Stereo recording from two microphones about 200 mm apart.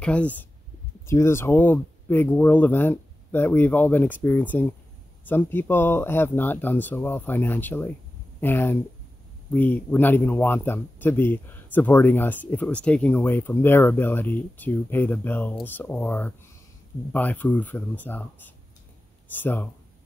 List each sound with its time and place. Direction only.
0.0 s a man's voice: 5° left (ahead or behind)